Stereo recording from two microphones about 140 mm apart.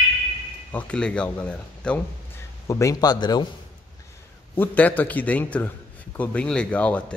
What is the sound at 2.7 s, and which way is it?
Speech, 25° left (ahead or behind).